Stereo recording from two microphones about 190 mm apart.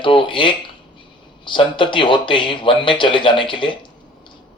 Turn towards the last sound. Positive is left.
turn(degrees=25)  # may be behind; listen again after turning